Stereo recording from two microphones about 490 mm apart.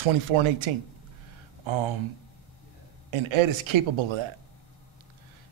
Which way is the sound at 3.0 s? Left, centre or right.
Right.